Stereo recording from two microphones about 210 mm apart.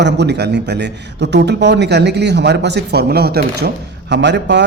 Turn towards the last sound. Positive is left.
turn(degrees=-55)  # may be behind; listen again after turning